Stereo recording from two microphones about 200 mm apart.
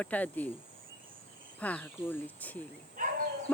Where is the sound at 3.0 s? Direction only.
40° right (ahead or behind).